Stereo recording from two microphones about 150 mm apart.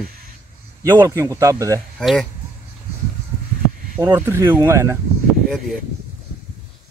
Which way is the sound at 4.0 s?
15° right (ahead or behind).